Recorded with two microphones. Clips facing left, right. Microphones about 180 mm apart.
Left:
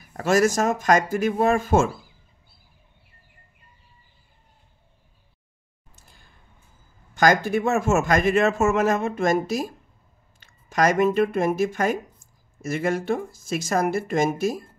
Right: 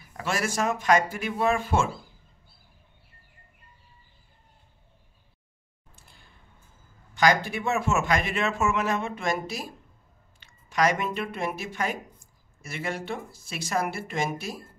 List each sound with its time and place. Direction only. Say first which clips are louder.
0.2 s a man's voice: left 8 dB; 40° left (ahead or behind)
5.9 s a sound: left 1 dB; 40° left (ahead or behind)
7.2 s a man's voice: left 4 dB; 45° left (ahead or behind)